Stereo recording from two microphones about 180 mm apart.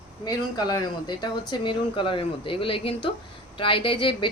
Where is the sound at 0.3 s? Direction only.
20° left (ahead or behind).